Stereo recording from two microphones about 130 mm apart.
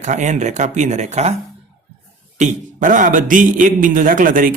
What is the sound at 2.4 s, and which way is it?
A man's voice, 80° right.